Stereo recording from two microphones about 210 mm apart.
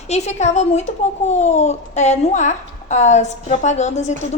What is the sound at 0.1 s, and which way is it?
A child's voice, 30° left (ahead or behind).